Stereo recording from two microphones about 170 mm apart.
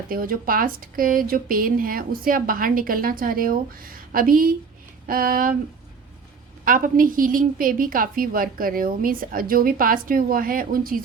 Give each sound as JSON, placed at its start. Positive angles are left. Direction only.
{"t": 0.1, "sound": "speech", "side_deg": -55}
{"t": 6.7, "sound": "speech", "side_deg": -55}